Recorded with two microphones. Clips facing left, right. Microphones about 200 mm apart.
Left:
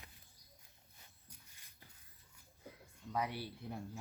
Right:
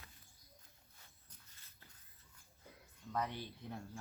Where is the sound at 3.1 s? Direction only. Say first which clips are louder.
Left 1 dB; 10° left (ahead or behind).